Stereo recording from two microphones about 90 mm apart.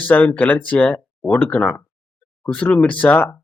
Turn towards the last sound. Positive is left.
turn(degrees=25)  # may be behind; listen again after turning